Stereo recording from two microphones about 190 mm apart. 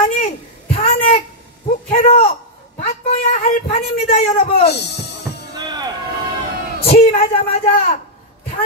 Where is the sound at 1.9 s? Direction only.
35° left (ahead or behind).